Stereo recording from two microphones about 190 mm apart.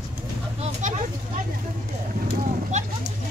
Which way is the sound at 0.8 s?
40° right (ahead or behind).